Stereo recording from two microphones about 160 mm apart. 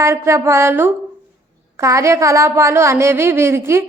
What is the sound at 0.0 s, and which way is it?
A woman's voice, 15° right (ahead or behind).